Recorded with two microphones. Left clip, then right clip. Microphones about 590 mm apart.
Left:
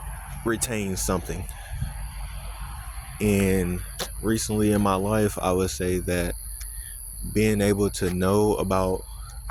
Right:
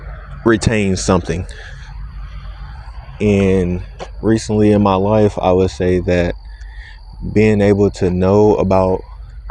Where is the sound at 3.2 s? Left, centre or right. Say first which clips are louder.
Right 9 dB; left.